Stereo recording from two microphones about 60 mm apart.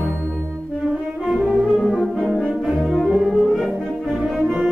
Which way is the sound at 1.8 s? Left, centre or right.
Centre.